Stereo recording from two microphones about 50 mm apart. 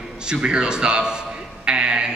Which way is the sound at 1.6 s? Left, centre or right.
Centre.